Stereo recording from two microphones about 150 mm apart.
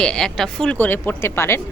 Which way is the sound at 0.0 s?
5° left (ahead or behind).